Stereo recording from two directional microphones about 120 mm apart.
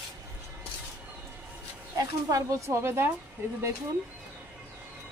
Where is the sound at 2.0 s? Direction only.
30° right (ahead or behind).